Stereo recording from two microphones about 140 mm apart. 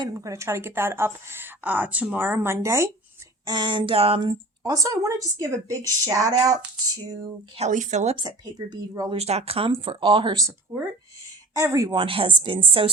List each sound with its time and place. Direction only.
0.0 s a woman's voice: 25° right (ahead or behind)
3.4 s speech: 30° right (ahead or behind)
7.5 s speech: 55° right (ahead or behind)
8.1 s a woman's voice: 30° right (ahead or behind)
9.1 s a woman's voice: 50° right (ahead or behind)
11.5 s a woman's voice: 20° right (ahead or behind); by 12.9 s 40° right (ahead or behind)